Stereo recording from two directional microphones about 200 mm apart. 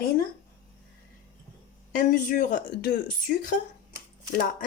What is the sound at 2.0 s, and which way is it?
Speech, 40° left (ahead or behind).